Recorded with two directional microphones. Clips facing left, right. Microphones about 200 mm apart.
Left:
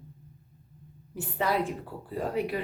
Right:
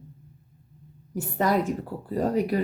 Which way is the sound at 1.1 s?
45° right (ahead or behind).